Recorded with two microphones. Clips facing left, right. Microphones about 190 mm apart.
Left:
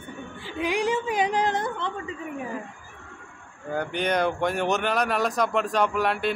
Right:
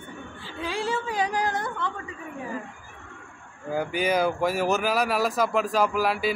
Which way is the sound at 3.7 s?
5° right (ahead or behind).